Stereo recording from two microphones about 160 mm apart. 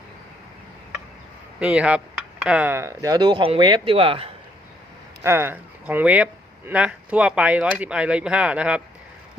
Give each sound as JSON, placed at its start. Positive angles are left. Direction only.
{"t": 1.5, "sound": "speech", "side_deg": -5}
{"t": 5.2, "sound": "speech", "side_deg": -15}